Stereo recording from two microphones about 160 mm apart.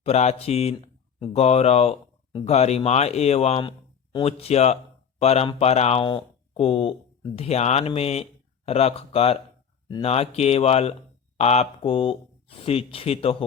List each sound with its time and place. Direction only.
0.0 s speech: 40° left (ahead or behind)